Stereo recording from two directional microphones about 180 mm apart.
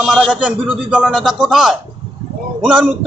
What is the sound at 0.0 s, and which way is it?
A man's voice, centre (ahead or behind).